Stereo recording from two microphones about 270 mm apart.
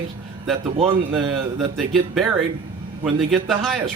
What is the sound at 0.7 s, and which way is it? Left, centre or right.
Speech, centre.